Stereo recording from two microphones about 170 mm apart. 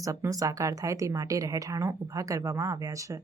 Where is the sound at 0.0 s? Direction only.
20° right (ahead or behind).